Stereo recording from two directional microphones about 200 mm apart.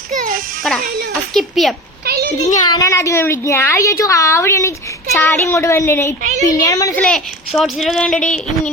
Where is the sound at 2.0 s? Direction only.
50° right (ahead or behind).